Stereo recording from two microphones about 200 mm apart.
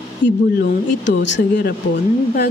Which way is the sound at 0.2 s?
5° left (ahead or behind).